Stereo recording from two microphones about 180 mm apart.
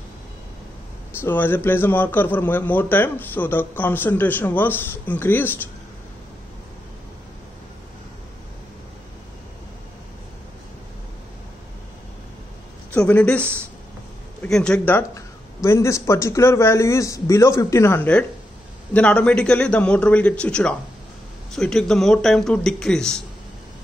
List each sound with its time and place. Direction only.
1.2 s speech: 10° left (ahead or behind)
12.9 s speech: 5° left (ahead or behind)